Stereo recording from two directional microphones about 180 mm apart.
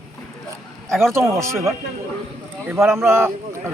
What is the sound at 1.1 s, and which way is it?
Speech, 15° right (ahead or behind).